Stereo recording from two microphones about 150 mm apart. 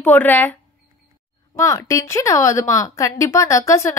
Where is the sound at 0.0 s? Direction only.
10° left (ahead or behind).